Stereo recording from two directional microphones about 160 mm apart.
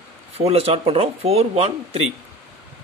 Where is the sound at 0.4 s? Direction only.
40° right (ahead or behind).